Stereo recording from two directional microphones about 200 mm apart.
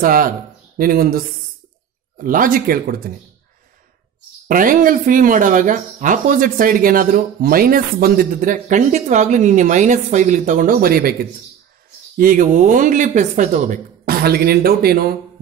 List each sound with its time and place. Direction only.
0.0 s speech: 45° right (ahead or behind)
4.5 s speech: 45° right (ahead or behind)
12.2 s speech: 45° right (ahead or behind)